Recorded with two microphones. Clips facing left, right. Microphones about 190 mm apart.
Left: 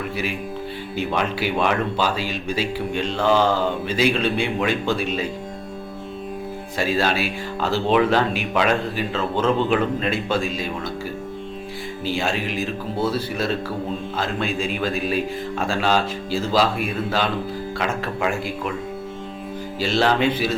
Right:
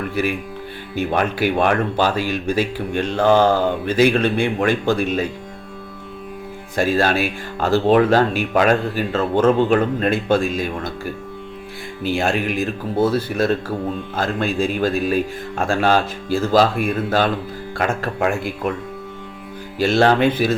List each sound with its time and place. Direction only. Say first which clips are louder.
0.9 s speech: right 4 dB; 50° right (ahead or behind)
6.7 s speech: right 4 dB; 50° right (ahead or behind)
19.8 s speech: right 5 dB; 50° right (ahead or behind)